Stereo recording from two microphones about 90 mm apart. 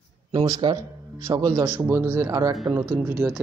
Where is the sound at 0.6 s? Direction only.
55° right (ahead or behind).